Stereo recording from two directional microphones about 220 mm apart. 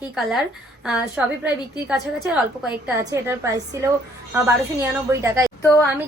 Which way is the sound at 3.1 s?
15° right (ahead or behind).